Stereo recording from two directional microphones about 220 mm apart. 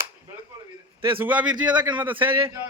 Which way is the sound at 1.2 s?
5° right (ahead or behind).